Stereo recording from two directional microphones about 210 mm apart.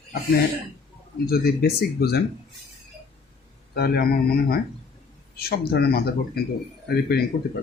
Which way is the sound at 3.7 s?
50° left (ahead or behind).